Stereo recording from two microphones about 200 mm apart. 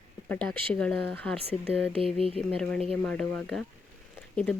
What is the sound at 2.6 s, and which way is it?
Speech, 5° left (ahead or behind).